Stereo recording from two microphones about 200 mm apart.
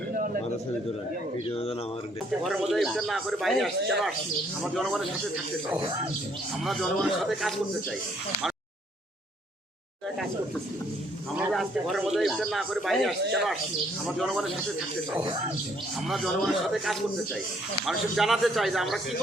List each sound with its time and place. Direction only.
1.5 s speech: 30° left (ahead or behind)
2.4 s speech: centre (ahead or behind)
6.7 s speech: centre (ahead or behind)
11.3 s speech: centre (ahead or behind)
16.0 s speech: centre (ahead or behind)